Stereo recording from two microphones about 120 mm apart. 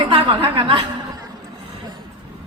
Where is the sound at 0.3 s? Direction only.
45° right (ahead or behind).